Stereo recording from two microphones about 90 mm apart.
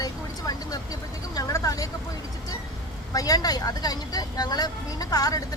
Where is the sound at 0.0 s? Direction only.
45° left (ahead or behind).